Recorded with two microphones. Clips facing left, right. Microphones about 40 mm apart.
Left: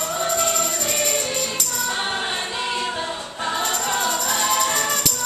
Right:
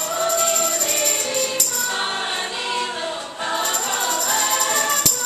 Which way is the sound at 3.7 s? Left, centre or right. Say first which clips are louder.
Left 1 dB; centre.